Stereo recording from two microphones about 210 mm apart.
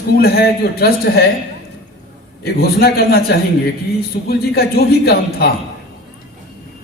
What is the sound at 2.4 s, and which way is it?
A man's voice, 50° left (ahead or behind).